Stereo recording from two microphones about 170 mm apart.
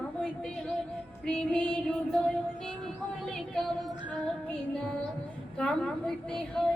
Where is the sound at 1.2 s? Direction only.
5° left (ahead or behind).